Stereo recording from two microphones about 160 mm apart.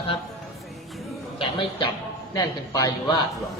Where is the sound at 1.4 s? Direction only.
35° left (ahead or behind).